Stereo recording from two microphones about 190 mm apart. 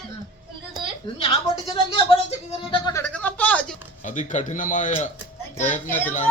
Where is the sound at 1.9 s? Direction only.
30° left (ahead or behind).